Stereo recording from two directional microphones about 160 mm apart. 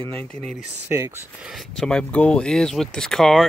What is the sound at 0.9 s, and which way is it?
Speech, 15° right (ahead or behind).